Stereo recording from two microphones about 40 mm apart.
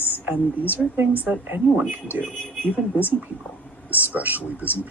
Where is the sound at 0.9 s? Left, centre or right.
Right.